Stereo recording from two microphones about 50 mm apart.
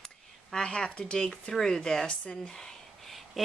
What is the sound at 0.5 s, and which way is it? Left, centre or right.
Speech, centre.